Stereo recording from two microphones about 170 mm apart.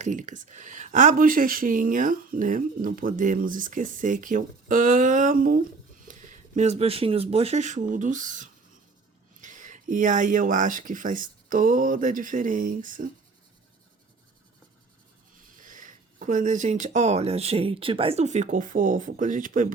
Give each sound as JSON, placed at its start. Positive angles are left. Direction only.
{"t": 0.0, "sound": "speech", "side_deg": -45}
{"t": 15.5, "sound": "speech", "side_deg": -50}